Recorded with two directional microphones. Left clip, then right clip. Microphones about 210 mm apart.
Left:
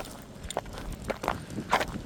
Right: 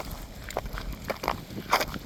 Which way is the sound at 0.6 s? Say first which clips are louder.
Right 1 dB; 45° right (ahead or behind).